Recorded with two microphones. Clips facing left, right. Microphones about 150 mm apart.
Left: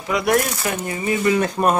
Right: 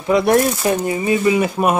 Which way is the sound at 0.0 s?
30° right (ahead or behind).